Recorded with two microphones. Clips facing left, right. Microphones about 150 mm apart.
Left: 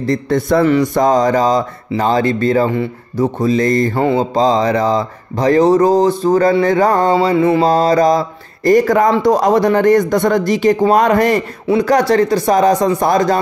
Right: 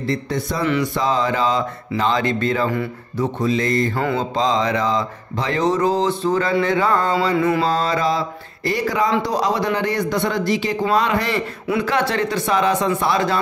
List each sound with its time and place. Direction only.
0.0 s speech: 50° left (ahead or behind)
2.0 s mantra: 40° left (ahead or behind)
3.9 s mantra: 25° left (ahead or behind)
4.2 s mantra: 40° left (ahead or behind)
7.6 s speech: 40° left (ahead or behind)
11.6 s mantra: 35° left (ahead or behind)